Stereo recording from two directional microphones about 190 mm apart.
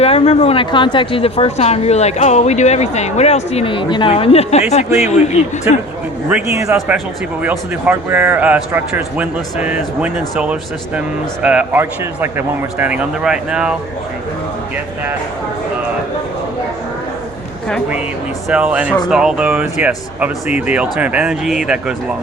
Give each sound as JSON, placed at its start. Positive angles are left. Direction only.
{"t": 0.0, "sound": "a woman's voice", "side_deg": 30}
{"t": 6.2, "sound": "a man's voice", "side_deg": -10}
{"t": 17.7, "sound": "a man's voice", "side_deg": 5}
{"t": 18.4, "sound": "a man's voice", "side_deg": -5}